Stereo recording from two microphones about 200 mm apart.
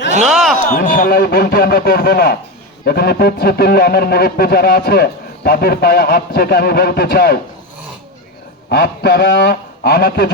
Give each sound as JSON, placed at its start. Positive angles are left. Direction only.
{"t": 0.3, "sound": "a sound", "side_deg": -5}
{"t": 0.7, "sound": "speech", "side_deg": 45}
{"t": 8.7, "sound": "speech", "side_deg": 50}